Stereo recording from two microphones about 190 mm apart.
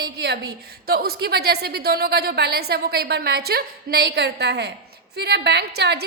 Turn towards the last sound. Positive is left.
turn(degrees=-60)  # may be behind; listen again after turning